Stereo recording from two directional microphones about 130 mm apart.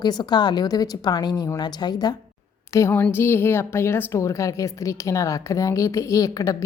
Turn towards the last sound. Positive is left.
turn(degrees=25)  # may be behind; listen again after turning